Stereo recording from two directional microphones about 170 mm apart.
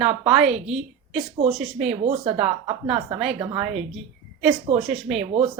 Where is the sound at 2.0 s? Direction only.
35° right (ahead or behind).